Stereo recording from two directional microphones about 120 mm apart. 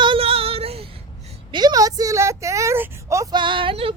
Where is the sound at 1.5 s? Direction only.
35° right (ahead or behind).